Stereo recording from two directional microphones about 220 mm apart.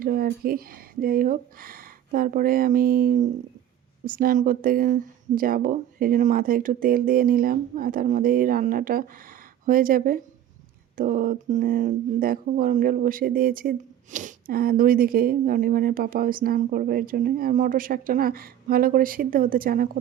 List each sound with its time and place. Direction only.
0.0 s speech: 40° right (ahead or behind)